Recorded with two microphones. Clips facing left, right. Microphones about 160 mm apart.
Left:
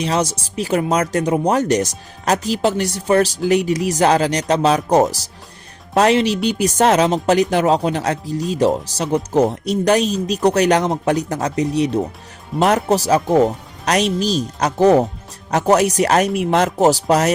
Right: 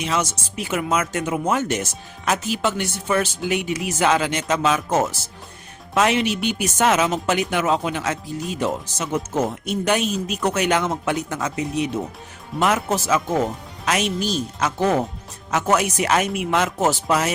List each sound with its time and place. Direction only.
0.0 s speech: 35° left (ahead or behind)